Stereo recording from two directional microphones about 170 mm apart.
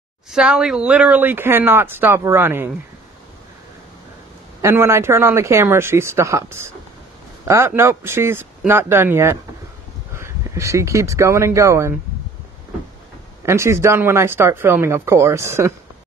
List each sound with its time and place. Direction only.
0.3 s speech: 5° right (ahead or behind)
4.6 s speech: 15° right (ahead or behind)
13.5 s speech: 15° right (ahead or behind)